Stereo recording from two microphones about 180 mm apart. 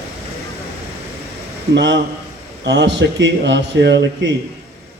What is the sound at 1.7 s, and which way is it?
A man's voice, 85° right.